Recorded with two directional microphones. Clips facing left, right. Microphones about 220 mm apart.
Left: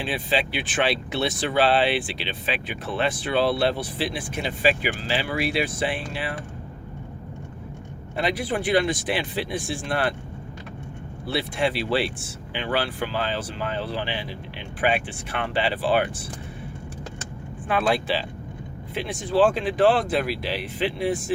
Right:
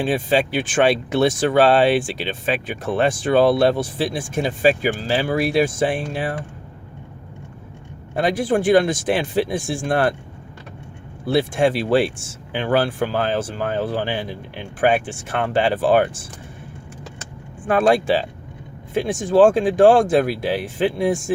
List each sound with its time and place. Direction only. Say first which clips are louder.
0.0 s speech: right 7 dB; 45° right (ahead or behind)
8.1 s speech: right 6 dB; 45° right (ahead or behind)
11.3 s speech: right 7 dB; 45° right (ahead or behind)
17.7 s speech: right 7 dB; 45° right (ahead or behind)